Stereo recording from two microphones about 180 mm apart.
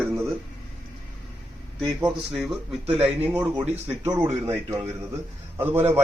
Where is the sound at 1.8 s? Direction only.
Centre (ahead or behind).